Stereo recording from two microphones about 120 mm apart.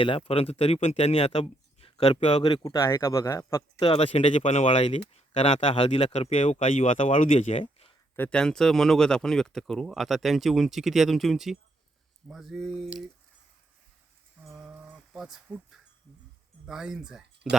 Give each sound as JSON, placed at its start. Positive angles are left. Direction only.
{"t": 0.0, "sound": "speech", "side_deg": 50}
{"t": 2.6, "sound": "speech", "side_deg": 25}
{"t": 3.8, "sound": "speech", "side_deg": 50}
{"t": 5.7, "sound": "speech", "side_deg": 50}
{"t": 7.6, "sound": "a sound", "side_deg": 45}
{"t": 8.1, "sound": "speech", "side_deg": 10}
{"t": 14.6, "sound": "a sound", "side_deg": -10}
{"t": 16.6, "sound": "speech", "side_deg": -5}